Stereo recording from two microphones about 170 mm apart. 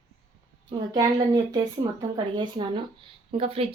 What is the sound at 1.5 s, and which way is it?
Speech, 25° right (ahead or behind).